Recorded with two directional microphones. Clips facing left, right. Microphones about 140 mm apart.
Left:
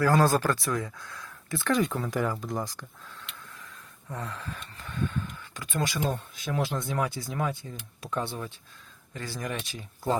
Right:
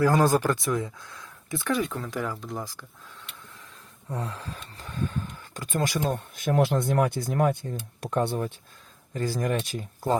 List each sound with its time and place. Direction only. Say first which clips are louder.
0.0 s speech: right 2 dB; 20° right (ahead or behind)
1.7 s speech: left 2 dB; centre (ahead or behind)
4.1 s speech: right 3 dB; 30° right (ahead or behind); by 10.2 s 50° right (ahead or behind)